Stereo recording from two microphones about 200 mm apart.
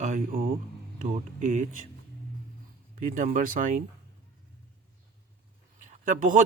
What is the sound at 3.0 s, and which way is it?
Speech, 40° right (ahead or behind).